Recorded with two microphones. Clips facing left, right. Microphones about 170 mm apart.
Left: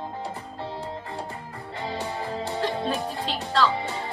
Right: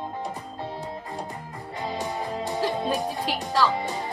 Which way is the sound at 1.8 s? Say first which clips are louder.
Right 1 dB; 20° right (ahead or behind).